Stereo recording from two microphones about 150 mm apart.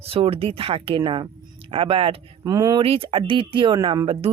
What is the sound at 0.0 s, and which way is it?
Speech, 40° right (ahead or behind).